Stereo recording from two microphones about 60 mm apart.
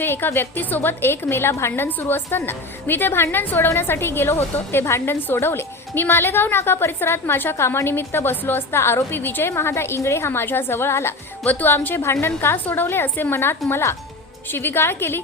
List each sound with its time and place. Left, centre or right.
0.0 s a woman's voice: left
11.4 s a woman's voice: left
11.9 s a woman's voice: left
12.6 s a woman's voice: left